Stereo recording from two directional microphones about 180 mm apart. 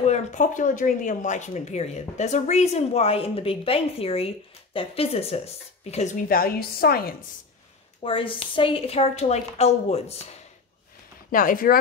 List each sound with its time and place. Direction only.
0.0 s speech: 40° left (ahead or behind)
6.2 s a woman's voice: 55° left (ahead or behind)
8.0 s speech: 30° left (ahead or behind)
11.3 s speech: 50° left (ahead or behind)